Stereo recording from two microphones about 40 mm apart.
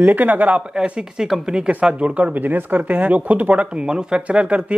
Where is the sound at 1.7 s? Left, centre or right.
Right.